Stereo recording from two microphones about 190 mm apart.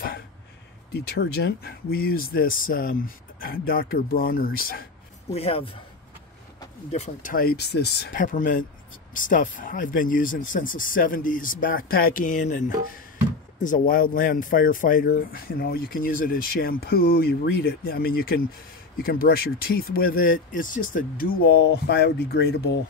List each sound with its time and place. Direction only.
0.9 s speech: 60° left (ahead or behind)
5.3 s speech: 30° left (ahead or behind)
6.9 s speech: 40° left (ahead or behind); by 8.2 s 60° left (ahead or behind)
8.2 s speech: 45° left (ahead or behind); by 22.8 s 60° left (ahead or behind)